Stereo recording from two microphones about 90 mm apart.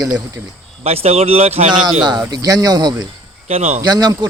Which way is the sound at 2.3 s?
45° right (ahead or behind).